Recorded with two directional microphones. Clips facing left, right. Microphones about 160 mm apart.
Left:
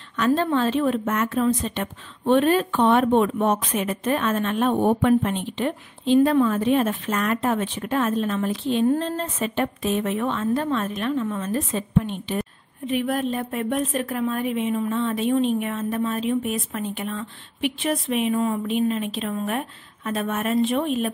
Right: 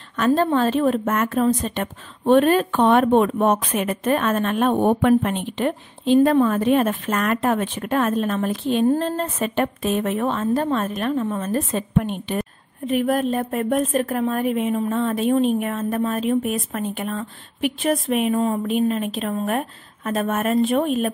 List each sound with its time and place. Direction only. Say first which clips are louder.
0.2 s a woman's voice: right 2 dB; 45° right (ahead or behind)